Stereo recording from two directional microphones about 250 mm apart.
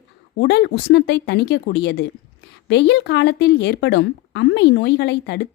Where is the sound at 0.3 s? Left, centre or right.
Left.